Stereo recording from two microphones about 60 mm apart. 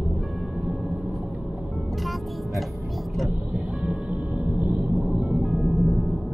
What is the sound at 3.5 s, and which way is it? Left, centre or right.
Music, right.